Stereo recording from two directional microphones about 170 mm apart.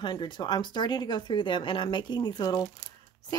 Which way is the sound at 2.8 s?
25° right (ahead or behind).